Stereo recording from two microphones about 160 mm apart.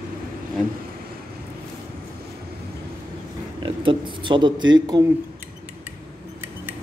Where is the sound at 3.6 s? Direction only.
30° right (ahead or behind).